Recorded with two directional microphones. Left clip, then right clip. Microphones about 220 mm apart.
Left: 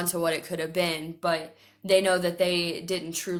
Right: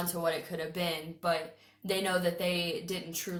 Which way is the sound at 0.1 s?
45° left (ahead or behind).